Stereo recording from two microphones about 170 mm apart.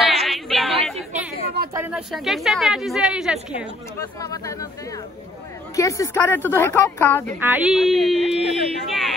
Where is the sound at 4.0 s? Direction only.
20° left (ahead or behind).